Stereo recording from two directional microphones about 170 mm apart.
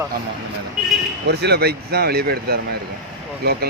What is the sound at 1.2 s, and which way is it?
A man's voice, 75° right (ahead or behind).